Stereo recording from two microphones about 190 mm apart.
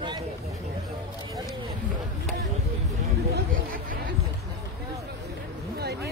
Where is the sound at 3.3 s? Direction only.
50° right (ahead or behind).